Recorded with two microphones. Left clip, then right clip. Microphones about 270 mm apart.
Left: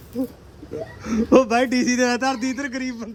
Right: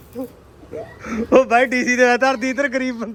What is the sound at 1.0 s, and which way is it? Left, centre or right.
A man's voice, centre.